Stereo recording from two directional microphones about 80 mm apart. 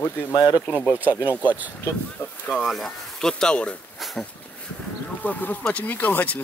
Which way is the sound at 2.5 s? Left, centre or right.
Centre.